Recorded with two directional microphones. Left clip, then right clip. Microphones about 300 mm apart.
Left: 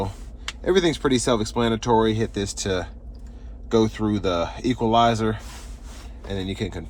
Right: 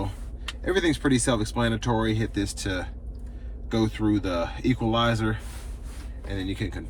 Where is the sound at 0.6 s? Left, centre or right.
Centre.